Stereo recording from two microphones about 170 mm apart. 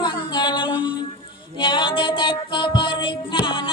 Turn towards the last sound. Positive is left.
turn(degrees=30)  # may be behind; listen again after turning